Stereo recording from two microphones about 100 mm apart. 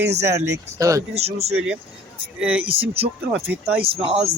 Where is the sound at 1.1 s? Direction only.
90° right.